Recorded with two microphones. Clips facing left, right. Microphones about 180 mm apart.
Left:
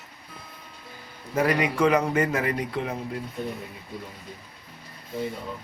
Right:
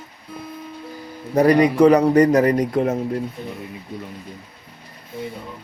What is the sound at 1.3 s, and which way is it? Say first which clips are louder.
A man's voice: right 9 dB; 35° right (ahead or behind).